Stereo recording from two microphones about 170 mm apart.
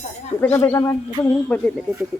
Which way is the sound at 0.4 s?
15° left (ahead or behind).